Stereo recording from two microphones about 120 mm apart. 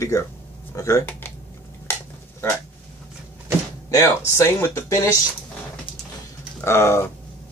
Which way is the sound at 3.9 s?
25° left (ahead or behind).